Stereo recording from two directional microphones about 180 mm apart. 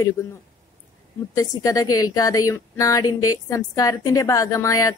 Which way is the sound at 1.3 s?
20° left (ahead or behind).